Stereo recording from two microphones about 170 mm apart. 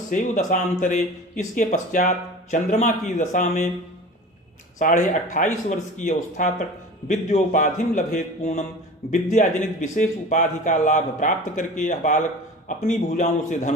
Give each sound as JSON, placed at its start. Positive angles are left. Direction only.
{"t": 0.1, "sound": "speech", "side_deg": 45}
{"t": 4.8, "sound": "speech", "side_deg": 50}